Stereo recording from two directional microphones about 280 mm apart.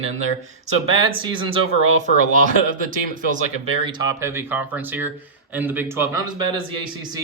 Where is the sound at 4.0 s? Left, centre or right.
Centre.